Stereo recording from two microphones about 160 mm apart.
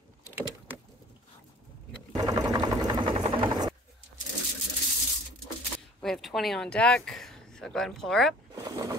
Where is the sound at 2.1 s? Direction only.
25° right (ahead or behind).